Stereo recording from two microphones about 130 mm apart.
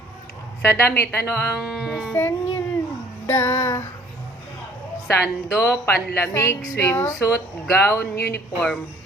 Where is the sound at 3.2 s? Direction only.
20° left (ahead or behind).